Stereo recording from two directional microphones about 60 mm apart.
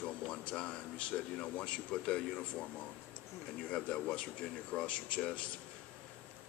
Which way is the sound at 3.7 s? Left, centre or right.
Centre.